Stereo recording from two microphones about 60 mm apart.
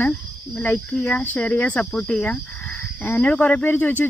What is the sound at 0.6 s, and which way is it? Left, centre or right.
Speech, centre.